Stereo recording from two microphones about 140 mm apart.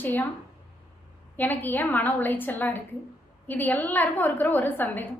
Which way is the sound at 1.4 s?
15° left (ahead or behind).